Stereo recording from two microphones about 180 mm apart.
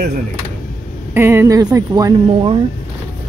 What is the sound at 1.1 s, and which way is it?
Speech, 10° right (ahead or behind).